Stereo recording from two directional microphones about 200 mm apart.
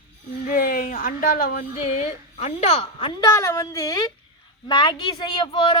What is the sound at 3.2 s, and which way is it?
Speech, 15° left (ahead or behind).